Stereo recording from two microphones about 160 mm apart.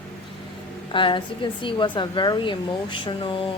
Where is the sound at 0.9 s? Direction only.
30° left (ahead or behind).